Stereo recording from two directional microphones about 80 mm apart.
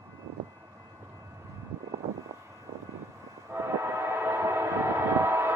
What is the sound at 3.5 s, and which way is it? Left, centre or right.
Train, right.